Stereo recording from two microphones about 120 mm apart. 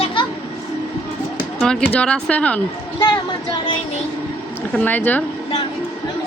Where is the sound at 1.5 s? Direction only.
5° left (ahead or behind).